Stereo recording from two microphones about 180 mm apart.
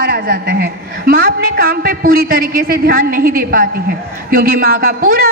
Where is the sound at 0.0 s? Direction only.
60° right (ahead or behind).